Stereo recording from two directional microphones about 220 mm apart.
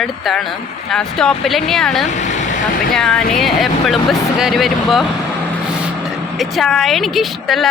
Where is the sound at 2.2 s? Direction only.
35° left (ahead or behind).